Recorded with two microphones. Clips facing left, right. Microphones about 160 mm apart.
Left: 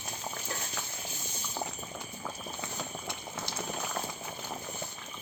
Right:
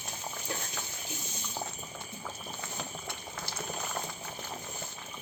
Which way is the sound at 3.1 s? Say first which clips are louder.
Left 2 dB; 20° left (ahead or behind).